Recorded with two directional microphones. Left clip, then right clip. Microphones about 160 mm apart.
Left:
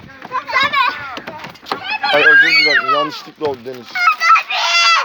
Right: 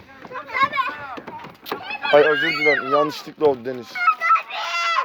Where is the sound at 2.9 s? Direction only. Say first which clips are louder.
Left 3 dB; 90° right.